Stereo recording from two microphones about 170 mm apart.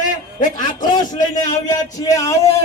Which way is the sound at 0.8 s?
25° left (ahead or behind).